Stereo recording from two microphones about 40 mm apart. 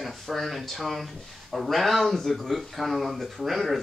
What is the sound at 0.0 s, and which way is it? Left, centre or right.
Speech, centre.